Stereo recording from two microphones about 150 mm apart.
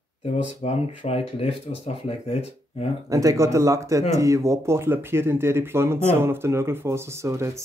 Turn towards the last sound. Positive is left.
turn(degrees=-20)  # may be behind; listen again after turning